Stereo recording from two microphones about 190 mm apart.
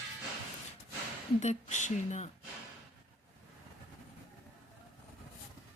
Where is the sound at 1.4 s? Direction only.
40° left (ahead or behind).